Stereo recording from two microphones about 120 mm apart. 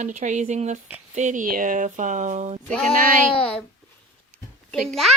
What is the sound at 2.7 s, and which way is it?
Speech, 10° left (ahead or behind).